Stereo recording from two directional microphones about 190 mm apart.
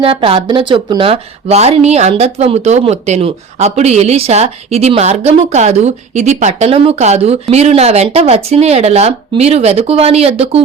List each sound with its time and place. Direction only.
0.0 s speech: 30° right (ahead or behind)